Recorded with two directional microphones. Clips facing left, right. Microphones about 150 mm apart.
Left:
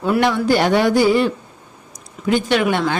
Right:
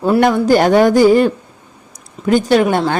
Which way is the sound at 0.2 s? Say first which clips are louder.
Right 5 dB; 45° right (ahead or behind).